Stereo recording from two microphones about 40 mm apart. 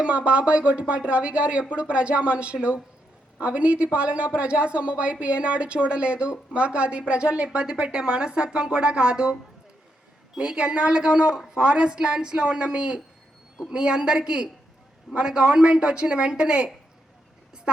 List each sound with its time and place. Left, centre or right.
0.0 s a woman's voice: right
10.3 s a woman's voice: right
15.1 s a man's voice: centre
15.5 s a woman's voice: right